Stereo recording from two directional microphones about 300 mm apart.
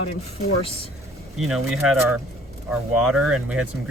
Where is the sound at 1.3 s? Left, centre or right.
Centre.